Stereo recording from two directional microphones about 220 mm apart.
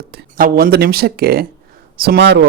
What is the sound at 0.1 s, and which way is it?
A man's voice, 45° right (ahead or behind).